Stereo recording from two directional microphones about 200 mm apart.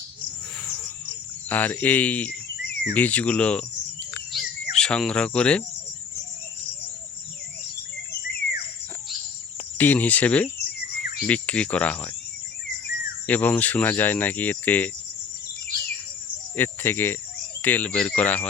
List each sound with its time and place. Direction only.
1.5 s speech: 10° left (ahead or behind)
4.1 s cricket: centre (ahead or behind)
8.4 s a sound: 45° right (ahead or behind)
9.7 s speech: 10° left (ahead or behind)
13.2 s speech: 10° left (ahead or behind)
16.6 s speech: 10° left (ahead or behind)